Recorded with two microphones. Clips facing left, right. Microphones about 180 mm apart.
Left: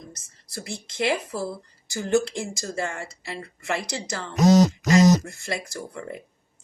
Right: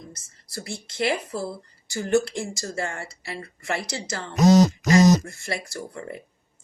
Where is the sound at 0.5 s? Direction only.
20° left (ahead or behind).